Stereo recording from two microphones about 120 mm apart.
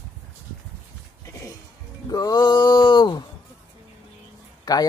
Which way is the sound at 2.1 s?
30° left (ahead or behind).